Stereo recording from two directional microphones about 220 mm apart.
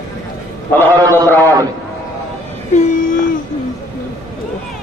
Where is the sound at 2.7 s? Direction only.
35° left (ahead or behind).